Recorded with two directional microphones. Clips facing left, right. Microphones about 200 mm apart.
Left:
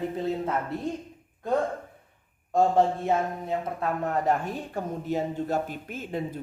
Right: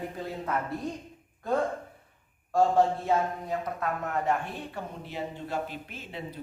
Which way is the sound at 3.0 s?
25° left (ahead or behind).